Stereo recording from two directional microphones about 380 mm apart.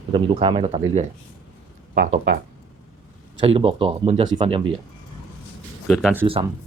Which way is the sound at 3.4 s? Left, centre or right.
Centre.